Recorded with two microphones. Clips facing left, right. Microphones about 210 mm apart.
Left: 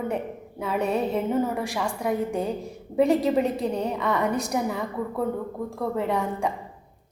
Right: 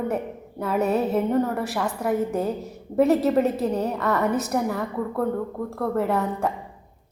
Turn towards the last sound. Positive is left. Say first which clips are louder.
# right 2 dB
turn(degrees=-5)  # may be behind; listen again after turning